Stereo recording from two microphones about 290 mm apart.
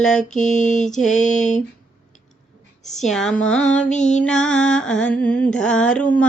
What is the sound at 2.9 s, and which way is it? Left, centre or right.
Music, centre.